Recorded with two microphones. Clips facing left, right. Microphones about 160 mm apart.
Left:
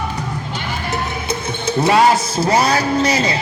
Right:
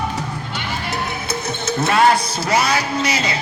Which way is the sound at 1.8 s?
15° left (ahead or behind).